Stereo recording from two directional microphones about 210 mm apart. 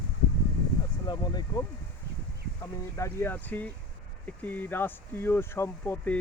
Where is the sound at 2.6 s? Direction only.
15° left (ahead or behind).